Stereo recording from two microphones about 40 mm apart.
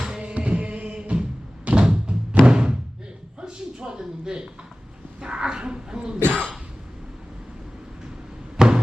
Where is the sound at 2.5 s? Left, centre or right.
Centre.